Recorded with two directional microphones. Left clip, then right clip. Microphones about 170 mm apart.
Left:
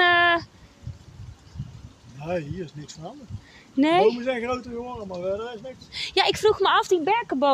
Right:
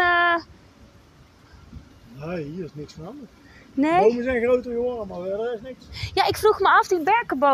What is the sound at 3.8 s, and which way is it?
Speech, 30° left (ahead or behind).